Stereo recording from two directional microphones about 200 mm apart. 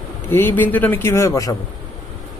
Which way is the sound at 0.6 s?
10° left (ahead or behind).